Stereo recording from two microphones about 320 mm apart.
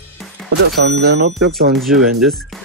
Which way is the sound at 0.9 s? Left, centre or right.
Right.